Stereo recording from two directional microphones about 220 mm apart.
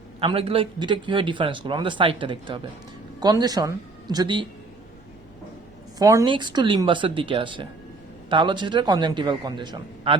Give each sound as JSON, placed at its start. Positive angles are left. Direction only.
{"t": 0.2, "sound": "speech", "side_deg": -25}
{"t": 6.0, "sound": "speech", "side_deg": -15}